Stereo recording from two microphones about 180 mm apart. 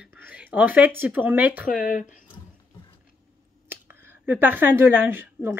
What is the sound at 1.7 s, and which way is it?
Speech, 50° left (ahead or behind).